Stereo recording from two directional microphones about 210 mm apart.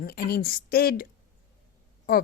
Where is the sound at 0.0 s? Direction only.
45° left (ahead or behind).